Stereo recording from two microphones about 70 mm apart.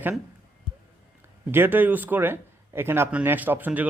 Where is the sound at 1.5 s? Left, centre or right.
Right.